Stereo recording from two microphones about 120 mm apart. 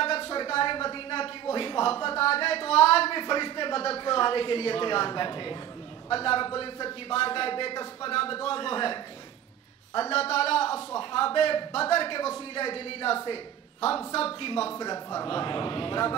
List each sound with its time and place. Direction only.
0.0 s a sound: 55° left (ahead or behind)
2.0 s a man's voice: 55° left (ahead or behind)
14.8 s a man's voice: 30° left (ahead or behind)
15.2 s a man's voice: 45° left (ahead or behind)